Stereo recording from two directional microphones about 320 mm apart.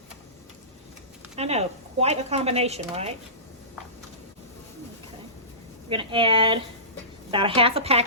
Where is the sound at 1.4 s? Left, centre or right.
Centre.